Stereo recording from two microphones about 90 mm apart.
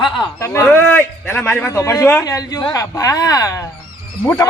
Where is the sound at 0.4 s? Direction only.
30° left (ahead or behind).